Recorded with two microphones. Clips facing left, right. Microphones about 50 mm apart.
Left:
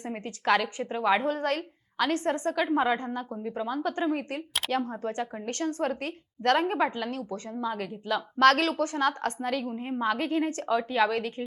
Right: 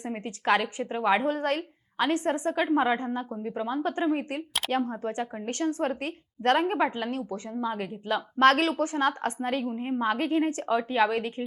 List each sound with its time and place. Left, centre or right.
0.3 s a woman's voice: right
2.0 s a woman's voice: centre